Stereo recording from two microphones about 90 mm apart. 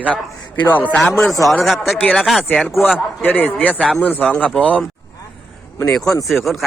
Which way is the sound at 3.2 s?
20° left (ahead or behind).